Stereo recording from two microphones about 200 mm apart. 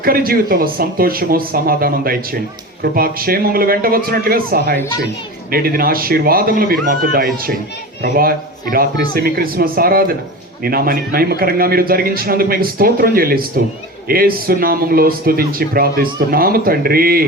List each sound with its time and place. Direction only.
0.0 s speech: 50° right (ahead or behind)